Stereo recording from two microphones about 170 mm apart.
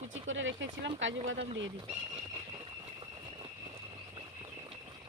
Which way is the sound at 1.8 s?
35° right (ahead or behind).